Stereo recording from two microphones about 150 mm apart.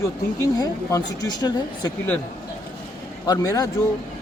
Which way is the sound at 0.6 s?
25° left (ahead or behind).